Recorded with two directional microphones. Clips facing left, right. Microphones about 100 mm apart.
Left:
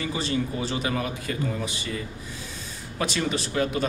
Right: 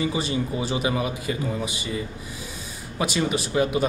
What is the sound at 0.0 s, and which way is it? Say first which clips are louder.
Speech: right 2 dB; 15° right (ahead or behind).